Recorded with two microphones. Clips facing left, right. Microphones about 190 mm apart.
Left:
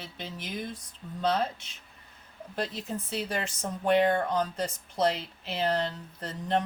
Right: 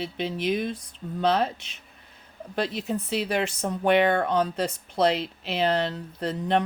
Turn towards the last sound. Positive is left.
turn(degrees=-65)  # may be behind; listen again after turning